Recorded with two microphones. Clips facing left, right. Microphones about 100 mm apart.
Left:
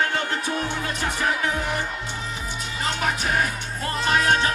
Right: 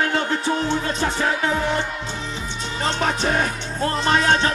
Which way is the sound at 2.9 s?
30° right (ahead or behind).